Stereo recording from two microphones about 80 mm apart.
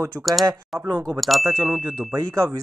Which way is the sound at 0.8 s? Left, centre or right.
Right.